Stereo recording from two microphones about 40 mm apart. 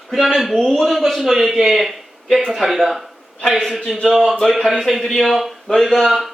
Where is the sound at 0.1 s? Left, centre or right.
Centre.